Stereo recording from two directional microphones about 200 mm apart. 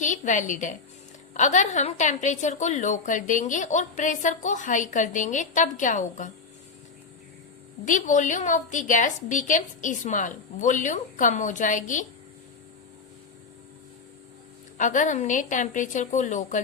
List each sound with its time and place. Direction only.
0.0 s a woman's voice: 40° left (ahead or behind)
7.9 s a woman's voice: 40° left (ahead or behind)
14.8 s a woman's voice: 40° left (ahead or behind)